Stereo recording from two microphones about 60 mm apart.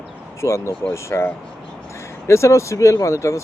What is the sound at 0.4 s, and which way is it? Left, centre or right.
Speech, left.